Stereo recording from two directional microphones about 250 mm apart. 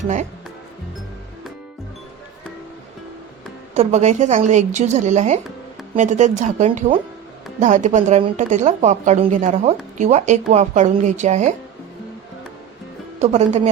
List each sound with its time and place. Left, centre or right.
3.8 s speech: right
13.1 s speech: right